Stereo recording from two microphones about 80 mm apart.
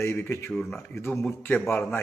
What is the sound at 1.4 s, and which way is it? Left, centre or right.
Speech, centre.